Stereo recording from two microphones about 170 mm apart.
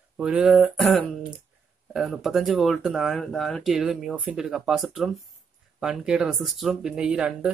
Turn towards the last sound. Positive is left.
turn(degrees=-5)  # may be behind; listen again after turning